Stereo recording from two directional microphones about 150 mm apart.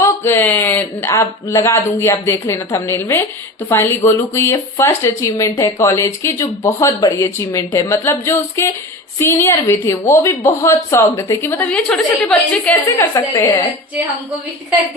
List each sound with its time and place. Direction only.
0.0 s speech: 15° left (ahead or behind)
13.1 s speech: 20° left (ahead or behind)